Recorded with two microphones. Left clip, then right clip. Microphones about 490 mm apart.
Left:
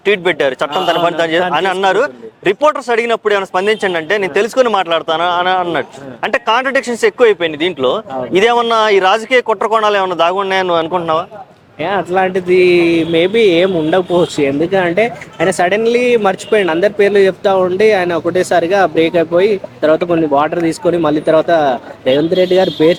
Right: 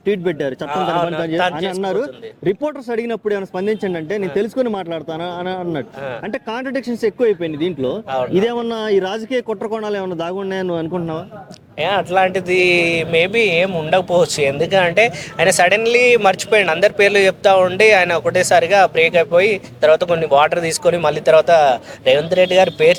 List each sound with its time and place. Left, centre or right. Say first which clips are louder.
0.0 s speech: left 7 dB; left
1.8 s speech: left 8 dB; left
7.8 s a man's voice: left 7 dB; centre
8.3 s speech: left 12 dB; left
11.8 s speech: left 1 dB; right